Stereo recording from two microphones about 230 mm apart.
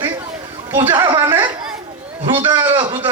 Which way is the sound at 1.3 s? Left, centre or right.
Centre.